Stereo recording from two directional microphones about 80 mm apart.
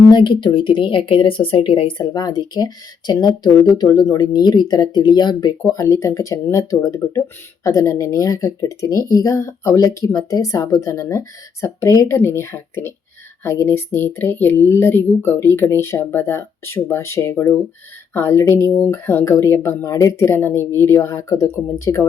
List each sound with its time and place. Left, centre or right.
0.1 s speech: left
5.7 s speech: left